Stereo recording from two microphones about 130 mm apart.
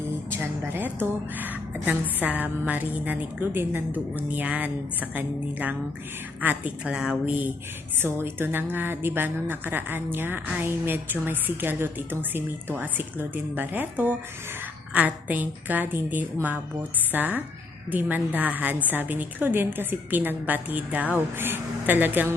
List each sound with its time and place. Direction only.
0.3 s a woman's voice: 15° right (ahead or behind)